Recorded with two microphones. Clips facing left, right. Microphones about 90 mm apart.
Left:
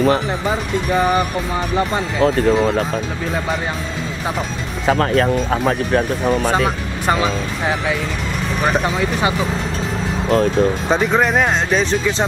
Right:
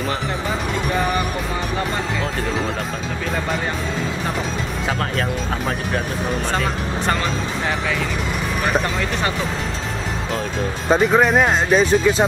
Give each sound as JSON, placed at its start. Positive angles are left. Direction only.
{"t": 5.1, "sound": "speech", "side_deg": 50}
{"t": 7.1, "sound": "speech", "side_deg": 10}
{"t": 10.9, "sound": "speech", "side_deg": 0}